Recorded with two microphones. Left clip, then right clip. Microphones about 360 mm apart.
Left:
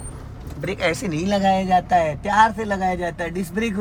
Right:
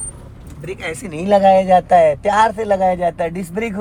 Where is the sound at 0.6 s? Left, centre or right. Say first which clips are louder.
Left 4 dB; centre.